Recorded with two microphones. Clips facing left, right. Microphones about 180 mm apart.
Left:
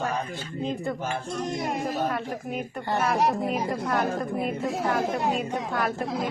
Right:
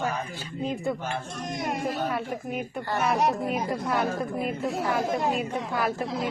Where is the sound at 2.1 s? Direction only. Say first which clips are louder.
Even; centre (ahead or behind).